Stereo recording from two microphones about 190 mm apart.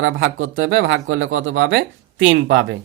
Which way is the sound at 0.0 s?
85° right.